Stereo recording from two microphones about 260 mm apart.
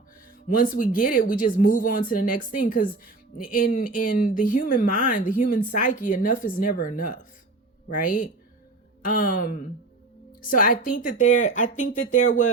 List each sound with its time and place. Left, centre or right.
0.4 s speech: left